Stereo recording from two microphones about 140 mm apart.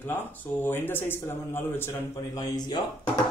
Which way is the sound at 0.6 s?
15° left (ahead or behind).